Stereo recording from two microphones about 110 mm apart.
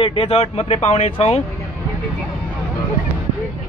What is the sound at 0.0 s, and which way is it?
Speech, 55° left (ahead or behind).